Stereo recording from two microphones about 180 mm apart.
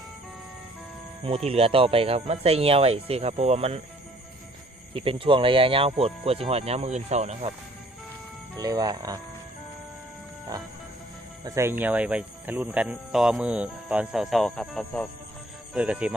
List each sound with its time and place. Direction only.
1.2 s speech: 35° right (ahead or behind)
5.0 s speech: 30° right (ahead or behind)
8.5 s speech: 20° right (ahead or behind)
11.4 s speech: 15° right (ahead or behind)